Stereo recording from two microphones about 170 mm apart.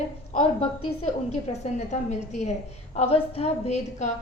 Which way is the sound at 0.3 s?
40° left (ahead or behind).